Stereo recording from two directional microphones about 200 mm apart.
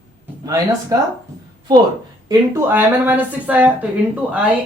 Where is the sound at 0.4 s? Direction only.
15° right (ahead or behind).